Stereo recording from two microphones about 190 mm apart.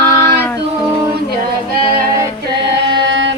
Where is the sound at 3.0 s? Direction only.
70° right (ahead or behind).